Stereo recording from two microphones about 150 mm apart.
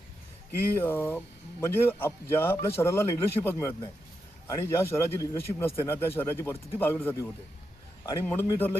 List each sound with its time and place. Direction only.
0.8 s a man's voice: 15° left (ahead or behind)